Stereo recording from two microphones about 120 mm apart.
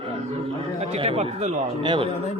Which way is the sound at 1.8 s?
45° right (ahead or behind).